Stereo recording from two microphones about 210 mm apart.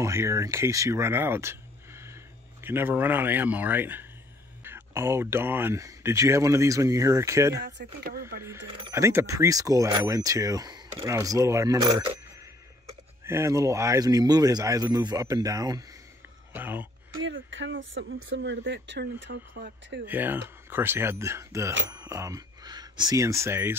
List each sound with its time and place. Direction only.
0.0 s speech: 15° right (ahead or behind)
7.6 s speech: 50° right (ahead or behind)
8.4 s speech: 10° right (ahead or behind)
13.2 s speech: 15° right (ahead or behind)
17.2 s speech: 65° right (ahead or behind); by 20.0 s 50° right (ahead or behind)
20.1 s speech: 10° right (ahead or behind)